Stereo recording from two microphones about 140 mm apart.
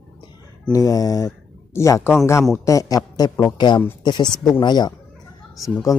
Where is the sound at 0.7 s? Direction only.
25° left (ahead or behind).